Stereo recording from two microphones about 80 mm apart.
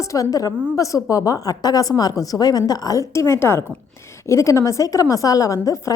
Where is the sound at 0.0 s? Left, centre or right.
Left.